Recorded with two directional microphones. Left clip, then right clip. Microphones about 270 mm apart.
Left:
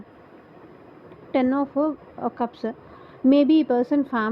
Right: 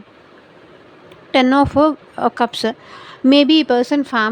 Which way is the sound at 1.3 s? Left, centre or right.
Right.